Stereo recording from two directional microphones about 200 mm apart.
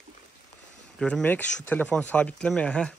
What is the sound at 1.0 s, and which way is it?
Speech, 5° left (ahead or behind).